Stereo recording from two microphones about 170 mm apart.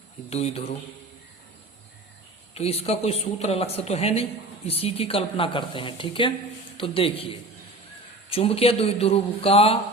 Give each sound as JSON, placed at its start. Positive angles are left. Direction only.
{"t": 0.3, "sound": "a man's voice", "side_deg": 40}
{"t": 2.6, "sound": "a man's voice", "side_deg": 35}
{"t": 8.3, "sound": "a man's voice", "side_deg": 35}